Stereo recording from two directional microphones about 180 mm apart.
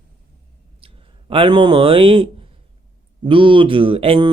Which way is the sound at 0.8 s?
30° right (ahead or behind).